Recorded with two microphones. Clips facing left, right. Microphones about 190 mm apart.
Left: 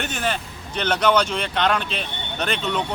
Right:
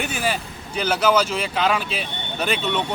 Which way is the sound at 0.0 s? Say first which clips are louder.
Right 1 dB; 10° right (ahead or behind).